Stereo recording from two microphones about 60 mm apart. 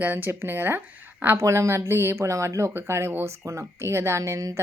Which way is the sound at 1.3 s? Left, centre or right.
Right.